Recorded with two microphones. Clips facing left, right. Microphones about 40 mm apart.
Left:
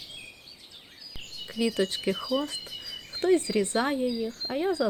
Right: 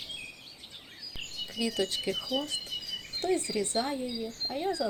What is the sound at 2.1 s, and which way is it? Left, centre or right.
Speech, left.